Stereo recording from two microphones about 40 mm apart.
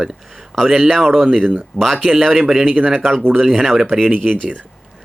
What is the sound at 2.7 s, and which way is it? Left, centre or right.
Speech, right.